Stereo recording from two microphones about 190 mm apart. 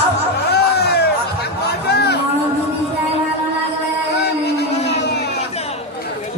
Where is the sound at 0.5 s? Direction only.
60° left (ahead or behind).